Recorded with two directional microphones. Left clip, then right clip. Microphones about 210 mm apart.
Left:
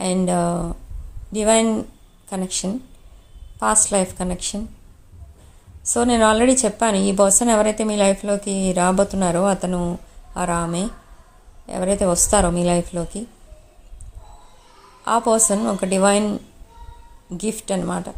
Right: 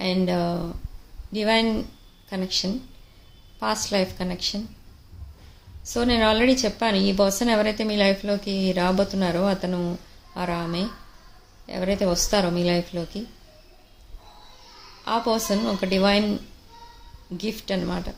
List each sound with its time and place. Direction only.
0.0 s a woman's voice: 25° left (ahead or behind)
3.6 s a woman's voice: 25° left (ahead or behind)
5.9 s a woman's voice: 25° left (ahead or behind)
15.0 s a woman's voice: 25° left (ahead or behind)